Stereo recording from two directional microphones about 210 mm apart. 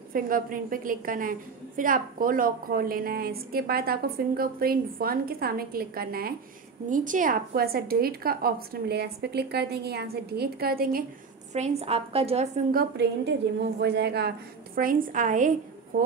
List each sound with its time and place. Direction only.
0.1 s a woman's voice: 40° right (ahead or behind)
11.5 s a woman's voice: 30° right (ahead or behind)
12.7 s a woman's voice: 55° right (ahead or behind)
14.8 s a woman's voice: 40° right (ahead or behind)